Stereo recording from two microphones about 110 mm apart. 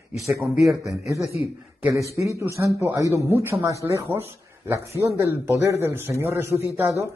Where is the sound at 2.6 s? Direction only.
25° right (ahead or behind).